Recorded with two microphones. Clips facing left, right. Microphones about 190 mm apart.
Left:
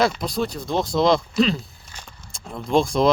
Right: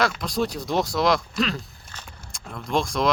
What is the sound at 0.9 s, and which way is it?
Speech, 25° left (ahead or behind).